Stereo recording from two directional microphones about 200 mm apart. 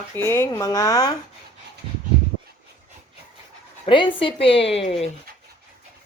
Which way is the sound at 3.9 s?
25° left (ahead or behind).